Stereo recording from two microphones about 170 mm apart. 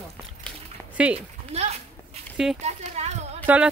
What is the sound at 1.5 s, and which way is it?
Speech, 40° right (ahead or behind).